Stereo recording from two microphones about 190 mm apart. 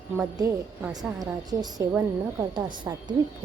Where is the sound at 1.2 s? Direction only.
20° right (ahead or behind).